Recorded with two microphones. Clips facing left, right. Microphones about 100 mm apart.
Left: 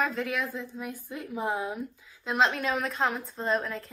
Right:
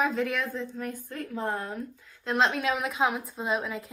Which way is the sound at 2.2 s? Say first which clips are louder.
Even; centre (ahead or behind).